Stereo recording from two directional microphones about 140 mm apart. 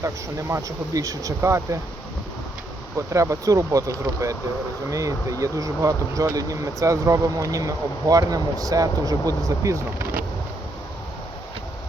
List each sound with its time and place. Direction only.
0.0 s speech: 20° right (ahead or behind)
3.1 s speech: 20° right (ahead or behind)